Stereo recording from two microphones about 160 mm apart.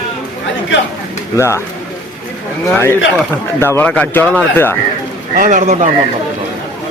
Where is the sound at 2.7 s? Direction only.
15° left (ahead or behind).